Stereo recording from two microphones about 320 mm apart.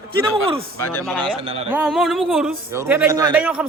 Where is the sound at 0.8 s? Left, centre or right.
Centre.